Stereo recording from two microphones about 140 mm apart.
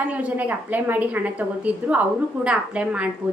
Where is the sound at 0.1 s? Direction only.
10° right (ahead or behind).